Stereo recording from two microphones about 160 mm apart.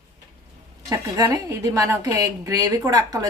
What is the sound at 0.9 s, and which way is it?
A woman's voice, 20° right (ahead or behind).